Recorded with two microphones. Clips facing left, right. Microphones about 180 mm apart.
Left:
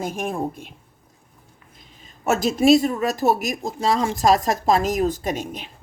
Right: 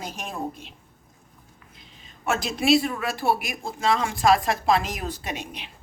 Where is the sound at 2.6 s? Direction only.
45° left (ahead or behind).